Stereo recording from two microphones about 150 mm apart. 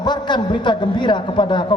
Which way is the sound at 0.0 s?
30° left (ahead or behind).